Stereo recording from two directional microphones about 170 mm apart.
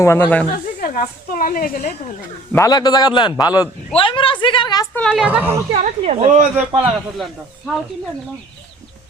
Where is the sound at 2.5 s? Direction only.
20° left (ahead or behind).